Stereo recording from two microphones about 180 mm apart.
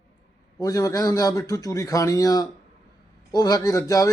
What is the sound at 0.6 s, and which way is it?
Speech, 20° left (ahead or behind).